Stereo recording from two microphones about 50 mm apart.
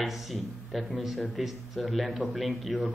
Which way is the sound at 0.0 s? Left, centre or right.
Centre.